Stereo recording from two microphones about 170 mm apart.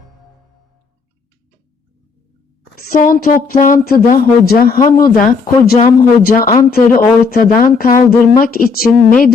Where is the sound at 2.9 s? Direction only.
55° left (ahead or behind).